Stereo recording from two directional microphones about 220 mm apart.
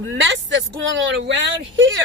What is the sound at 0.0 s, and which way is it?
Speech, 60° right (ahead or behind).